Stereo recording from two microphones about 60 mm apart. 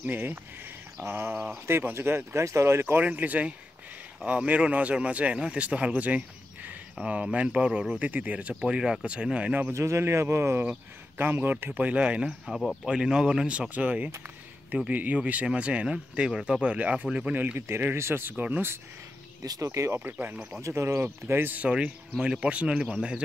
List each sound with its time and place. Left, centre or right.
0.0 s speech: right
3.0 s speech: right
8.5 s speech: centre
9.7 s speech: right
11.1 s speech: right
17.6 s speech: right
19.4 s speech: right
20.0 s speech: right
20.6 s speech: right
21.0 s speech: right
21.5 s speech: centre